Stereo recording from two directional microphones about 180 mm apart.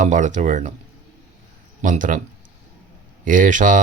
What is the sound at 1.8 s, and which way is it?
Speech, 45° right (ahead or behind).